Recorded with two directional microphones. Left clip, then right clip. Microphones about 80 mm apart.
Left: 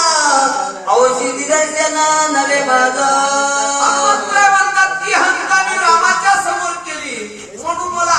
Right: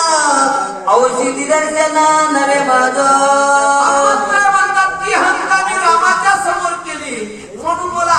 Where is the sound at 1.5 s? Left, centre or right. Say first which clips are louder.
Right 2 dB; right.